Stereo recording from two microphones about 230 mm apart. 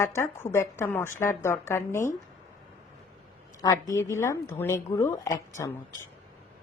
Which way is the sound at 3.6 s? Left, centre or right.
Centre.